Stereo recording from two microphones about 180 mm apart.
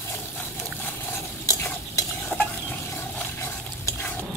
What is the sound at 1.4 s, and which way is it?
Stir, 20° left (ahead or behind).